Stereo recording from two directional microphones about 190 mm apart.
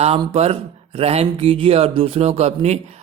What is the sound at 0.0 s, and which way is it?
Speech, 30° right (ahead or behind).